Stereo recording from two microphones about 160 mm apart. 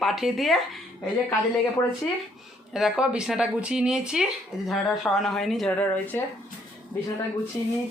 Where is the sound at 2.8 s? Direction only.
5° right (ahead or behind).